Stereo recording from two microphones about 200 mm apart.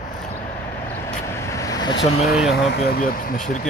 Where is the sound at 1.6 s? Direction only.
20° left (ahead or behind).